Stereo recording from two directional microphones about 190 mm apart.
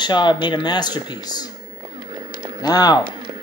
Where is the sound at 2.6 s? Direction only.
20° left (ahead or behind).